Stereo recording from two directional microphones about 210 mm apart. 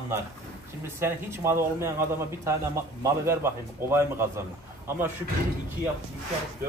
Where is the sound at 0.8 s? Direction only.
10° right (ahead or behind).